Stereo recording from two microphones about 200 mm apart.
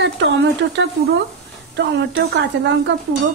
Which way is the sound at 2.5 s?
60° right (ahead or behind).